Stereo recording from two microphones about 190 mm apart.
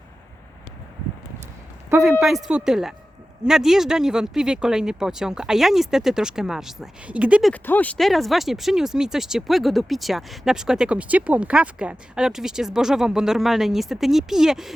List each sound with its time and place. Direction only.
2.0 s speech: centre (ahead or behind)
7.5 s speech: 10° left (ahead or behind)